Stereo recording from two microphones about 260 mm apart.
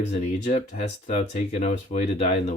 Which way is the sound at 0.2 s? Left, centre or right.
Left.